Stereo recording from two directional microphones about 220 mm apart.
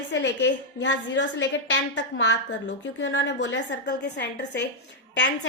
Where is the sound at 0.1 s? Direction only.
50° left (ahead or behind).